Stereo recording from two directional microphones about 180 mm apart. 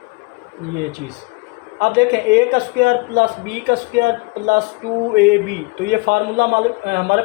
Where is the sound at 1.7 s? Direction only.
70° right (ahead or behind).